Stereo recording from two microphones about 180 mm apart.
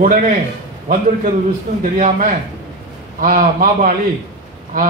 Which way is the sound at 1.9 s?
50° right (ahead or behind).